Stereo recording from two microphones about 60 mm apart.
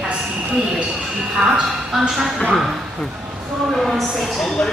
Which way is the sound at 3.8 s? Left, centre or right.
Centre.